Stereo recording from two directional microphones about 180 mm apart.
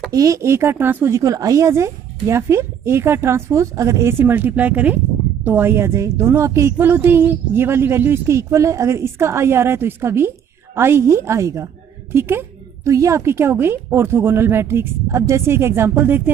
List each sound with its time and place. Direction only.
0.1 s speech: 20° right (ahead or behind)